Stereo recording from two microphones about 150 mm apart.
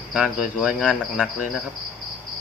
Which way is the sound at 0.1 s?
5° right (ahead or behind).